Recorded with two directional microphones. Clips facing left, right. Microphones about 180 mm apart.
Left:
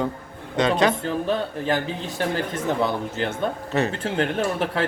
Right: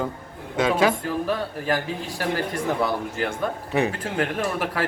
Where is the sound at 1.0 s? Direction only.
25° left (ahead or behind).